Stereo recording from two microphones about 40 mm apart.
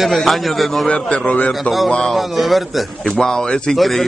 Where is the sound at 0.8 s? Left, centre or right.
Left.